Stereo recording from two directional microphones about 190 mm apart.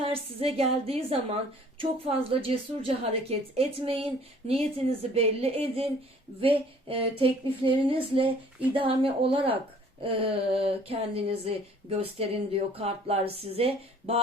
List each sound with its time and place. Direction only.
0.0 s a woman's voice: 30° right (ahead or behind)